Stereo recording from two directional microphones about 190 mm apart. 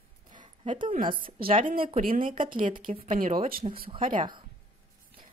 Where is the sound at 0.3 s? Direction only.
25° right (ahead or behind).